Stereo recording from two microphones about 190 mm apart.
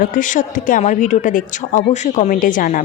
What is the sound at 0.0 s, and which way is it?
A woman's voice, 45° left (ahead or behind).